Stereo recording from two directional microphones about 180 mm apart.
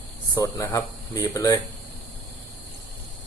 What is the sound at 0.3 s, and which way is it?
Speech, 20° left (ahead or behind).